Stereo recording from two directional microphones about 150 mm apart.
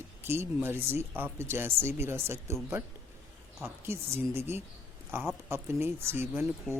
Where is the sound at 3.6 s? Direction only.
15° right (ahead or behind).